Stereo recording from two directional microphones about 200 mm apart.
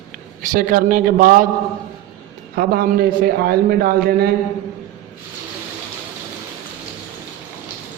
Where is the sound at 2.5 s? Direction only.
50° right (ahead or behind).